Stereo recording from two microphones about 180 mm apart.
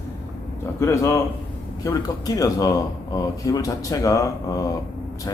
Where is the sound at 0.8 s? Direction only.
15° left (ahead or behind).